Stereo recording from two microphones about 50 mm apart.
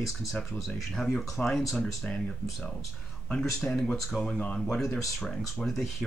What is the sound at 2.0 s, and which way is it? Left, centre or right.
Speech, centre.